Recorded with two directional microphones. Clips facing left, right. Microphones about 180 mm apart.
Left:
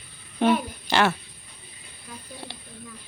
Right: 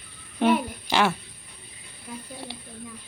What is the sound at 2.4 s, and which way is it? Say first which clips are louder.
Snake: right 2 dB; 5° right (ahead or behind).